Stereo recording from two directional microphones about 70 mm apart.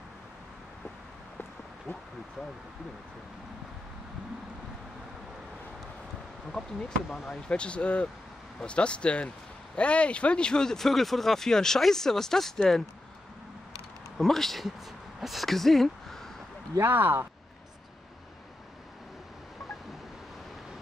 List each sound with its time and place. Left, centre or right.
6.6 s speech: centre
7.2 s speech: centre
14.1 s speech: centre
16.8 s speech: right